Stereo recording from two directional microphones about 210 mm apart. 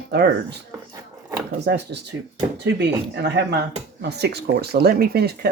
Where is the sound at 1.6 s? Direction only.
55° right (ahead or behind).